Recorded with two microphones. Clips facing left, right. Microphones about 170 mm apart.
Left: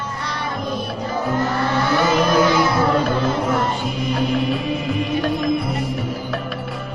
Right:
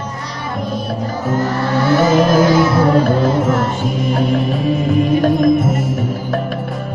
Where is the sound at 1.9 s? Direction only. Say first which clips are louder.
Right 6 dB; 45° right (ahead or behind).